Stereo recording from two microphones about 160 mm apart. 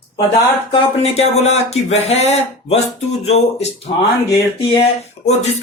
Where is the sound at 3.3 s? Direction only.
40° left (ahead or behind).